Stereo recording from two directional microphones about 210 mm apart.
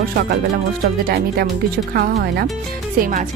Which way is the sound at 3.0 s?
40° right (ahead or behind).